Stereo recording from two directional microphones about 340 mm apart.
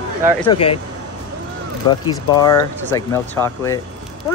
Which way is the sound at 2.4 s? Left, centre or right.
Centre.